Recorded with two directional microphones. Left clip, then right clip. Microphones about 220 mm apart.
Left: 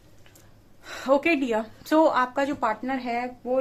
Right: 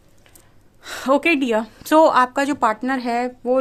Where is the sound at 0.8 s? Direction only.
45° right (ahead or behind).